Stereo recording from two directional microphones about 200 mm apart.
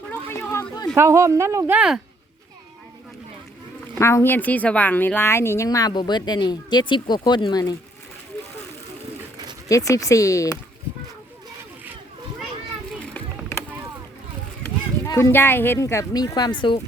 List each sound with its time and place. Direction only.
0.1 s a sound: 10° left (ahead or behind)
0.9 s speech: 15° right (ahead or behind)
3.9 s a woman's voice: 15° left (ahead or behind)
9.6 s a woman's voice: 15° left (ahead or behind)
13.0 s a sound: 5° left (ahead or behind)
15.0 s a woman's voice: 15° left (ahead or behind)